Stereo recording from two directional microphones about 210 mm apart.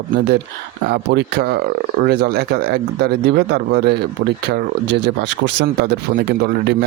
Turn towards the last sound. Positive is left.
turn(degrees=-50)  # may be behind; listen again after turning